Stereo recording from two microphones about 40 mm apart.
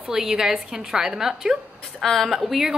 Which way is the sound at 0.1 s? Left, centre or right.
Centre.